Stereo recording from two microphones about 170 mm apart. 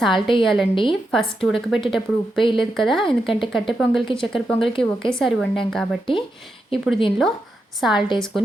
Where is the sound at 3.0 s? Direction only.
30° left (ahead or behind).